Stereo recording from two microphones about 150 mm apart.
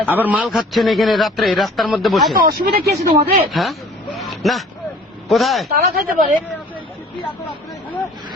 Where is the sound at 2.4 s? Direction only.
80° right.